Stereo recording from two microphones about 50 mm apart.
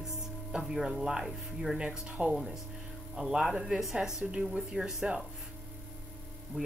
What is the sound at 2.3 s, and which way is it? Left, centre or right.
A woman's voice, centre.